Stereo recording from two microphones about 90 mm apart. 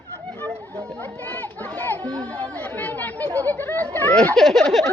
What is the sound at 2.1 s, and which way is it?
Chatter, 15° left (ahead or behind).